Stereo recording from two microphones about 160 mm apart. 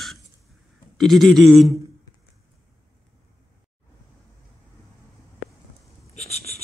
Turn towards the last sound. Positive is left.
turn(degrees=45)  # may be behind; listen again after turning